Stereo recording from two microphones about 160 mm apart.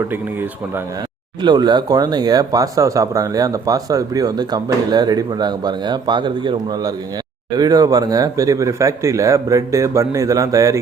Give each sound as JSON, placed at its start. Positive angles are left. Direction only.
{"t": 0.0, "sound": "speech", "side_deg": -15}
{"t": 1.4, "sound": "speech", "side_deg": -25}